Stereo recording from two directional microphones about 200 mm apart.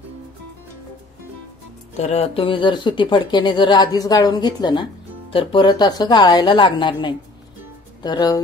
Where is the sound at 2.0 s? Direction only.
30° left (ahead or behind).